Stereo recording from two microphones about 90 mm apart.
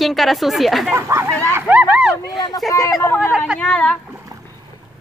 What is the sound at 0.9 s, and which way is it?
Speech, 35° right (ahead or behind).